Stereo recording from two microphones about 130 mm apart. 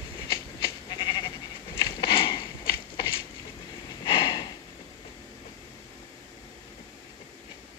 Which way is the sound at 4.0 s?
40° left (ahead or behind).